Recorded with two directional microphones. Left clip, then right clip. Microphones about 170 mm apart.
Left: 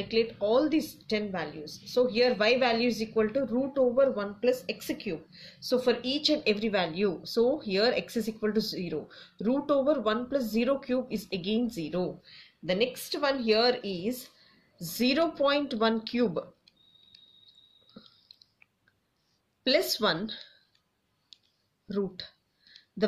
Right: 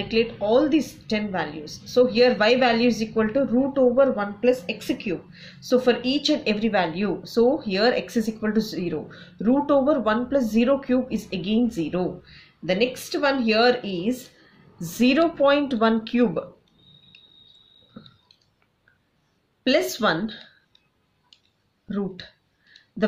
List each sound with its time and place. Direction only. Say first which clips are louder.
0.1 s a woman's voice: right 5 dB; 25° left (ahead or behind)
17.9 s chewing: right 6 dB; 25° left (ahead or behind)
19.6 s a woman's voice: right 5 dB; 25° left (ahead or behind)
21.8 s a woman's voice: right 2 dB; 30° left (ahead or behind)